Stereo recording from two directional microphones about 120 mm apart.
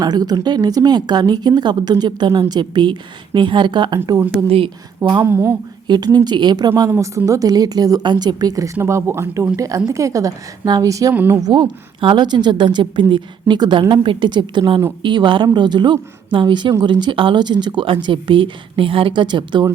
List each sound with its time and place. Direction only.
0.0 s a woman's voice: 35° right (ahead or behind)
4.4 s speech: 50° right (ahead or behind)
5.2 s speech: 20° right (ahead or behind)
6.1 s a woman's voice: 35° right (ahead or behind)
6.9 s speech: 20° right (ahead or behind)
11.1 s a woman's voice: 15° right (ahead or behind)
11.3 s a woman's voice: 35° right (ahead or behind)